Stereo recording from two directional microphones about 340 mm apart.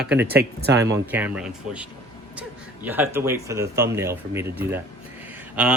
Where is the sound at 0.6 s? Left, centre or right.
Right.